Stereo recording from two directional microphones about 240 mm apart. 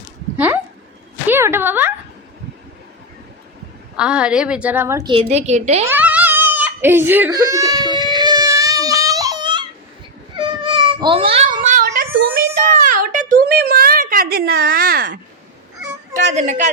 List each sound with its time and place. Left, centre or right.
0.3 s a sound: centre
3.9 s a woman's voice: centre
5.3 s a woman's voice: right
5.8 s crying: centre
10.3 s cat: centre; by 12.0 s right
12.1 s a sound: right
16.3 s a woman's voice: right